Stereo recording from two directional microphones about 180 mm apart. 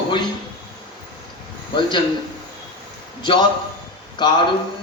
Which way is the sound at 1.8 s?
25° left (ahead or behind).